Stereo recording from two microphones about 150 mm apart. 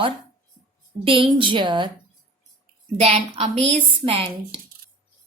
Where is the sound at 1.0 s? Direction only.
35° right (ahead or behind).